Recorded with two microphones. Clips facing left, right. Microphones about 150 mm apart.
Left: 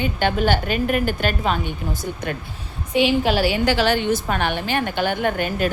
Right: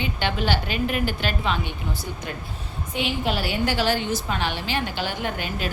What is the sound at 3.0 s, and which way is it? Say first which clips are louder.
A woman's voice: left 8 dB; 90° left.